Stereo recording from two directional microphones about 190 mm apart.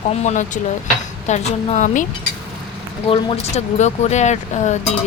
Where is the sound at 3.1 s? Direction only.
35° left (ahead or behind).